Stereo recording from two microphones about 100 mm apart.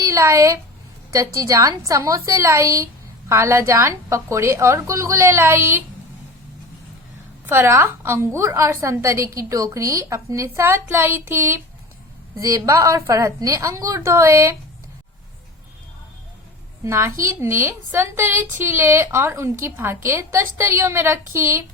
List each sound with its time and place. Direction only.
0.0 s a woman's voice: 30° right (ahead or behind)
7.4 s a woman's voice: 25° right (ahead or behind)
12.4 s a woman's voice: 35° right (ahead or behind)
16.8 s a woman's voice: 25° right (ahead or behind)